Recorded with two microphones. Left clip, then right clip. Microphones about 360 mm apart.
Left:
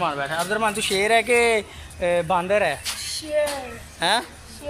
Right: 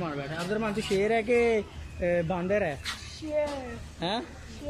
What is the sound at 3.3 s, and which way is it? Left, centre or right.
Speech, left.